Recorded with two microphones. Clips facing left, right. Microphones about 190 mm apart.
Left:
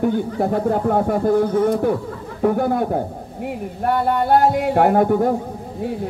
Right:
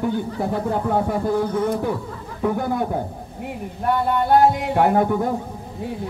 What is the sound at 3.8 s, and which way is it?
A man's voice, 45° left (ahead or behind).